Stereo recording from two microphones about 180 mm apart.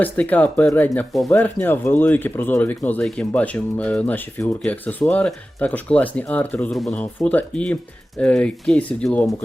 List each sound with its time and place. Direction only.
0.0 s speech: 10° left (ahead or behind)